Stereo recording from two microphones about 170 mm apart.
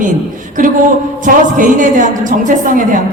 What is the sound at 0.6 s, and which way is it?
A woman's voice, 50° right (ahead or behind).